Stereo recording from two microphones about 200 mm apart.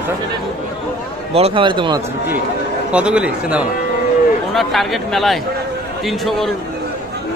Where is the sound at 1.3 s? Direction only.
30° right (ahead or behind).